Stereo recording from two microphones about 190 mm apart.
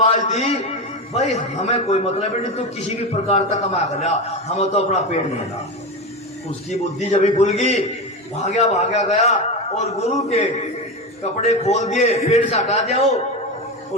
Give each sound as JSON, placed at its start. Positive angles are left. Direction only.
{"t": 0.1, "sound": "a man's voice", "side_deg": 35}
{"t": 6.7, "sound": "a man's voice", "side_deg": 35}